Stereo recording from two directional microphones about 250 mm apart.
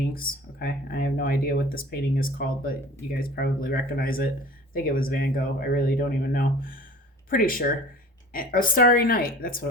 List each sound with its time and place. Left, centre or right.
0.1 s speech: left